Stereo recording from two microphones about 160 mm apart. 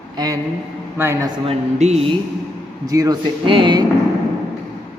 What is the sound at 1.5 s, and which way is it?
Speech, 40° right (ahead or behind).